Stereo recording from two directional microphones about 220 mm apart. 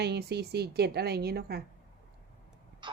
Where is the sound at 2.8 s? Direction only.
20° right (ahead or behind).